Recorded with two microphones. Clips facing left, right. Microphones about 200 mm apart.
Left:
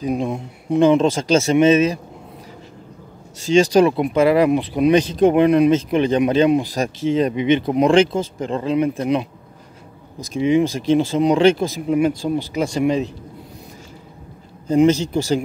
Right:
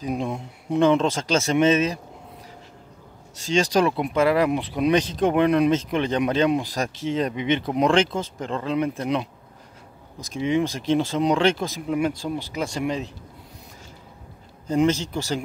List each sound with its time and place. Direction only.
0.0 s speech: 10° left (ahead or behind)
3.4 s speech: 10° left (ahead or behind)
10.2 s speech: 10° left (ahead or behind)
12.5 s speech: 15° left (ahead or behind)
14.7 s speech: 15° left (ahead or behind)